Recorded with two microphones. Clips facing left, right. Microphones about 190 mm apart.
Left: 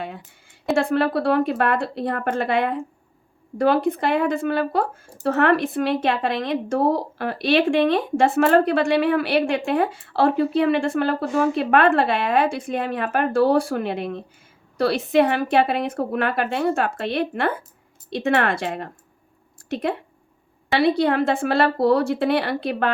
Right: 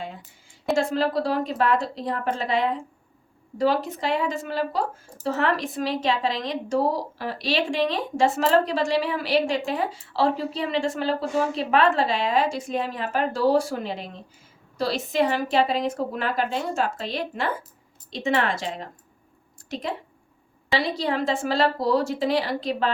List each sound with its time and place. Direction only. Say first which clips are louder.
0.8 s speech: left 3 dB; 60° left (ahead or behind)